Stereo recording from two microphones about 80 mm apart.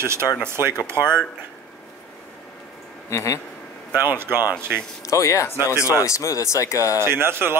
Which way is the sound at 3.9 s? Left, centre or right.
Right.